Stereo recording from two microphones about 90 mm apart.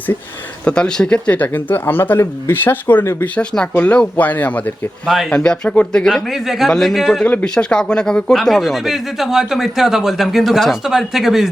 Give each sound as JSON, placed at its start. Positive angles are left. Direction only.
{"t": 0.6, "sound": "speech", "side_deg": 10}
{"t": 3.3, "sound": "speech", "side_deg": 10}
{"t": 5.0, "sound": "speech", "side_deg": 5}
{"t": 5.4, "sound": "speech", "side_deg": 15}
{"t": 6.3, "sound": "speech", "side_deg": -5}